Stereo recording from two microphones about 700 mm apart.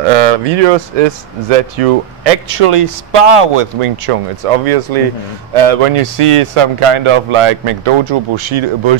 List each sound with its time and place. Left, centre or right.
0.3 s speech: right